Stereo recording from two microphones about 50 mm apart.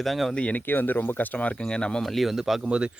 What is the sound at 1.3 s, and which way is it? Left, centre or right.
Speech, left.